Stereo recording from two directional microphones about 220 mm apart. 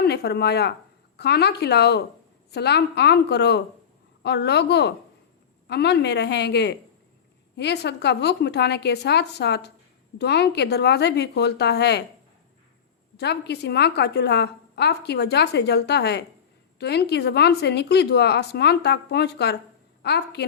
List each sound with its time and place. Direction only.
0.0 s a woman's voice: 50° left (ahead or behind)
13.1 s a woman's voice: 50° left (ahead or behind)